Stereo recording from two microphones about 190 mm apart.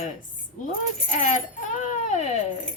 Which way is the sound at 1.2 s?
40° left (ahead or behind).